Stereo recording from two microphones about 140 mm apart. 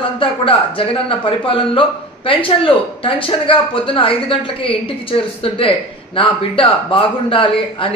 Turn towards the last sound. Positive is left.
turn(degrees=40)  # may be behind; listen again after turning